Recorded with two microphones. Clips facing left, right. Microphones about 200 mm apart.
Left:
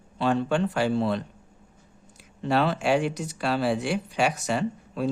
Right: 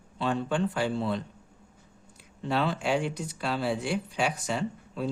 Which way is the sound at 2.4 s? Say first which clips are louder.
Left 4 dB; 70° left (ahead or behind).